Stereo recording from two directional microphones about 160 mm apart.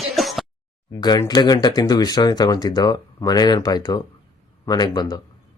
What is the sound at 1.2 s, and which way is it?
Speech, 25° left (ahead or behind).